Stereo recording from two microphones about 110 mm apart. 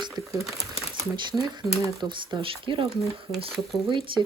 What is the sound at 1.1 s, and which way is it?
Speech, 45° right (ahead or behind).